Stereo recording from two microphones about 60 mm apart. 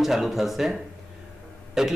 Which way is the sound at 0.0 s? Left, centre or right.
Centre.